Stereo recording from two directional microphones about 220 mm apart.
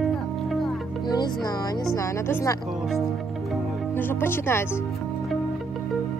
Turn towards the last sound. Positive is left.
turn(degrees=10)  # may be behind; listen again after turning